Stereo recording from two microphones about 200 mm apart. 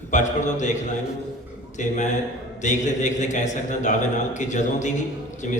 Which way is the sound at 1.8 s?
35° left (ahead or behind).